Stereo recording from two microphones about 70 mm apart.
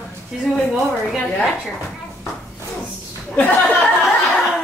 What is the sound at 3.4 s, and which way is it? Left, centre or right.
Speech, left.